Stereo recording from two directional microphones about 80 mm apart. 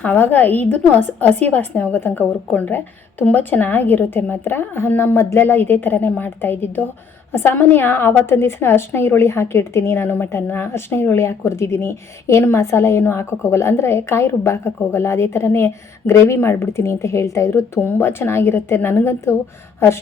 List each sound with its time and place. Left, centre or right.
0.0 s a woman's voice: left
17.7 s a woman's voice: left